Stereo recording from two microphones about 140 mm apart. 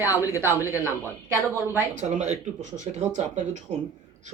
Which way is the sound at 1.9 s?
55° right (ahead or behind).